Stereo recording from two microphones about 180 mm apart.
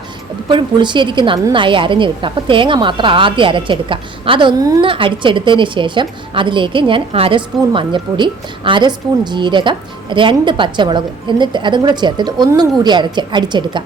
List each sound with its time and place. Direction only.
0.4 s a woman's voice: 25° right (ahead or behind)